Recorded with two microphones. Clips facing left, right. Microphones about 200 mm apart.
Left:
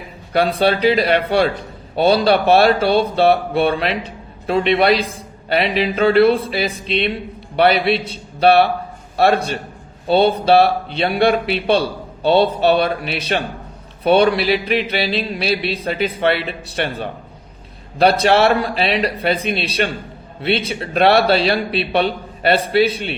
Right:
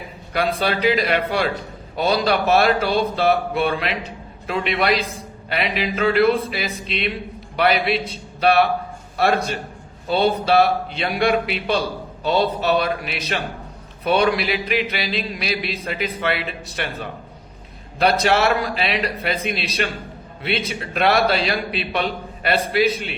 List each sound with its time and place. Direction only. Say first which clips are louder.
0.3 s a man's voice: left 5 dB; 30° left (ahead or behind)